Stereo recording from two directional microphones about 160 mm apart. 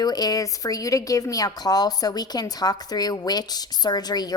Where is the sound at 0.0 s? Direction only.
25° left (ahead or behind).